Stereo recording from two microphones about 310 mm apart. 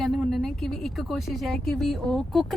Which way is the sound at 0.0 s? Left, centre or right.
Centre.